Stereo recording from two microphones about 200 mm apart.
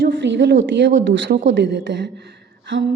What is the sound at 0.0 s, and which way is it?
A woman's voice, 65° right (ahead or behind).